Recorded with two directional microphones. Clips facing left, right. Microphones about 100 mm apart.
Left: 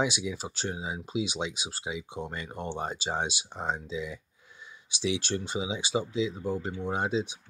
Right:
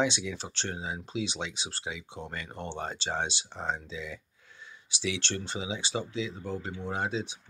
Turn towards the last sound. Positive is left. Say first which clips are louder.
# left 3 dB
turn(degrees=15)  # may be behind; listen again after turning